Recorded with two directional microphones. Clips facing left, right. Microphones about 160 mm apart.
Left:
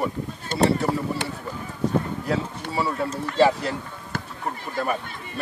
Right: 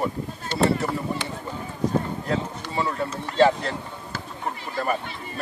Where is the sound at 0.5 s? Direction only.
45° left (ahead or behind).